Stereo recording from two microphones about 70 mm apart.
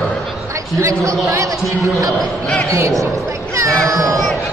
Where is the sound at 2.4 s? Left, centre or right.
Centre.